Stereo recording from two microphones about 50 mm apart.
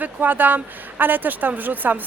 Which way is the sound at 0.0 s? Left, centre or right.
Right.